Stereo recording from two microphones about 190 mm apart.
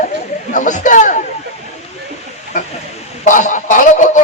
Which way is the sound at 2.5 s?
40° left (ahead or behind).